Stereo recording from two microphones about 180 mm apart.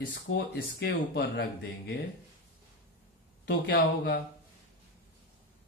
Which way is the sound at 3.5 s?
60° left (ahead or behind).